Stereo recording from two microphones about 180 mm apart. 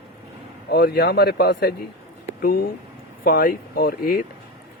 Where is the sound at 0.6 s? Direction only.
65° left (ahead or behind).